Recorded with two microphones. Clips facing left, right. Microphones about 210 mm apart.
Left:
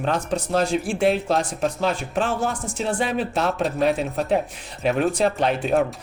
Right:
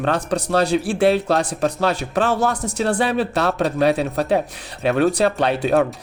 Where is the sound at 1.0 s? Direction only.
70° right (ahead or behind).